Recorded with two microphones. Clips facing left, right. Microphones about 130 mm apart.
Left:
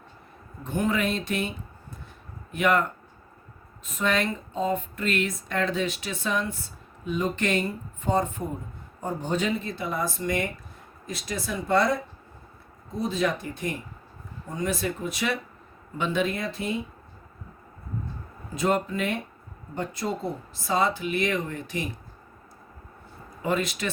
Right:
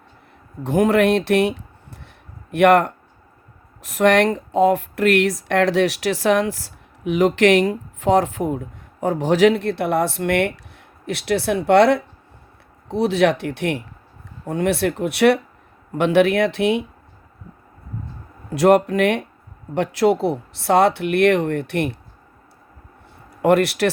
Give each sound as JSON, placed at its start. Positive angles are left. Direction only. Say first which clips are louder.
{"t": 0.6, "sound": "speech", "louder": "right 10 dB", "side_deg": -80}
{"t": 18.5, "sound": "speech", "louder": "right 11 dB", "side_deg": -75}
{"t": 19.7, "sound": "speech", "louder": "right 13 dB", "side_deg": -85}
{"t": 23.4, "sound": "speech", "louder": "right 11 dB", "side_deg": -70}